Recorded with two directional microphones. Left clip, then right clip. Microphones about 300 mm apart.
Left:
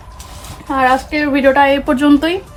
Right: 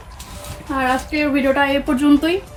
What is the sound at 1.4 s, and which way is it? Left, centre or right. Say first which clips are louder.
Speech: left 9 dB; centre.